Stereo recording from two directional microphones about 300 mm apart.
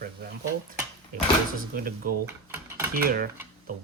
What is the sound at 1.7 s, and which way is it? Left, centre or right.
Speech, right.